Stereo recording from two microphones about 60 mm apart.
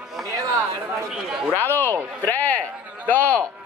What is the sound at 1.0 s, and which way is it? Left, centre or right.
Speech, centre.